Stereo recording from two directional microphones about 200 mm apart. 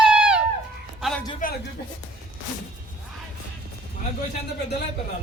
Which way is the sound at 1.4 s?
40° left (ahead or behind).